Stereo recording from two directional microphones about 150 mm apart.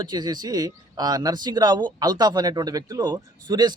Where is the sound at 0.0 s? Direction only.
30° right (ahead or behind).